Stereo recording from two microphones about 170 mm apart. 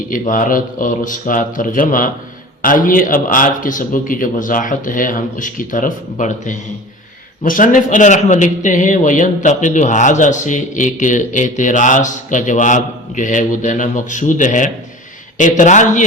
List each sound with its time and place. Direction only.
0.1 s a man's voice: 50° left (ahead or behind)